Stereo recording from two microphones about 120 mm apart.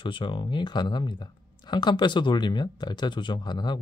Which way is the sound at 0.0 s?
40° left (ahead or behind).